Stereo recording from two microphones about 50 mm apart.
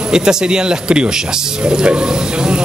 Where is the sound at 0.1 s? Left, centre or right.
Centre.